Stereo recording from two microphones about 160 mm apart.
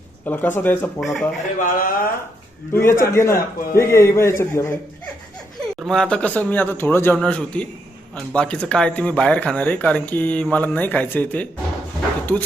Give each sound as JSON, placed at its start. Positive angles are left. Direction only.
{"t": 0.3, "sound": "speech", "side_deg": 10}
{"t": 0.9, "sound": "a man's voice", "side_deg": 0}
{"t": 1.5, "sound": "speech", "side_deg": 55}
{"t": 2.7, "sound": "speech", "side_deg": 15}
{"t": 5.5, "sound": "speech", "side_deg": 0}